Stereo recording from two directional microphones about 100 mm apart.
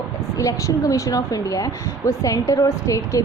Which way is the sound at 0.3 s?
35° left (ahead or behind).